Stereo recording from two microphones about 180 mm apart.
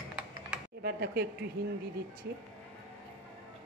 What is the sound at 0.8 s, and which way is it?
Speech, 60° right (ahead or behind).